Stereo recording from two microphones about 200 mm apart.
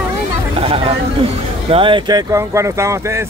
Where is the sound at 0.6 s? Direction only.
30° right (ahead or behind).